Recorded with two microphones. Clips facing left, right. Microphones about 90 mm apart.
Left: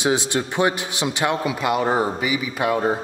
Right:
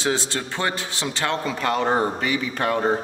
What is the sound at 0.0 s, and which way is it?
Speech, 15° left (ahead or behind).